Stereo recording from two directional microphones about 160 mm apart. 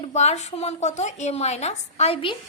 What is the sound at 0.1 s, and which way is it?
A woman's voice, 45° left (ahead or behind).